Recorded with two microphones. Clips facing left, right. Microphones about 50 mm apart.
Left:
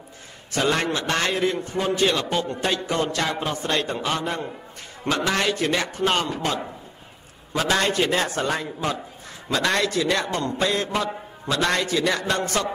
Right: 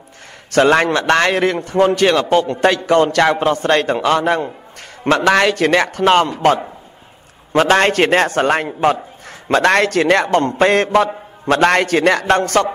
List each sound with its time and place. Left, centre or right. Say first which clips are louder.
0.5 s a man's voice: right 10 dB; right
9.5 s a man's voice: right 9 dB; right